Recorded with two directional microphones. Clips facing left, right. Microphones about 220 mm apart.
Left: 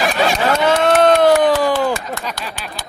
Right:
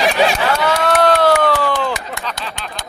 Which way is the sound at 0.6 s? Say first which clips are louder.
Left 4 dB; 20° left (ahead or behind).